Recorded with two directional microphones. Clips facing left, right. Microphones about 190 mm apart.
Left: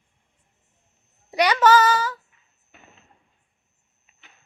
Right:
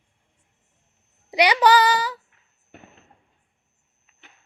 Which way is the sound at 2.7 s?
60° right (ahead or behind).